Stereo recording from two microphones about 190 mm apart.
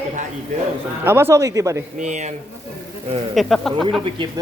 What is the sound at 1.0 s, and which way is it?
Speech, 10° right (ahead or behind).